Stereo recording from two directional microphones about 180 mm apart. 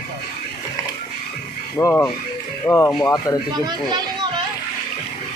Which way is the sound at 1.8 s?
15° left (ahead or behind).